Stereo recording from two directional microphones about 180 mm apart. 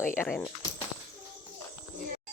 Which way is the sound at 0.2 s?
5° left (ahead or behind).